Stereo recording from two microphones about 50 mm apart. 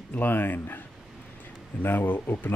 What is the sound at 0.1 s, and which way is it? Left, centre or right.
Speech, left.